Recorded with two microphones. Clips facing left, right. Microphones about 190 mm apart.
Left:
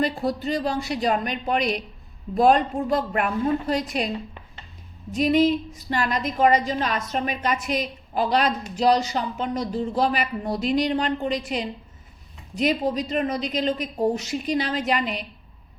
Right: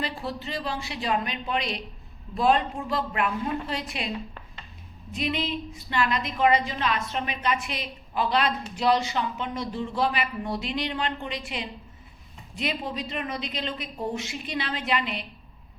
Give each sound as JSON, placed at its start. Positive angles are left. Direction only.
{"t": 0.0, "sound": "a woman's voice", "side_deg": 45}
{"t": 5.1, "sound": "a woman's voice", "side_deg": 45}